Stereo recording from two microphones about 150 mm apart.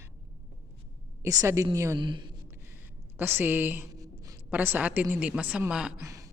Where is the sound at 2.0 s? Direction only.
30° right (ahead or behind).